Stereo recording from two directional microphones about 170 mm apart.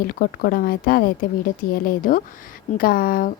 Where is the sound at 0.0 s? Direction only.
60° left (ahead or behind).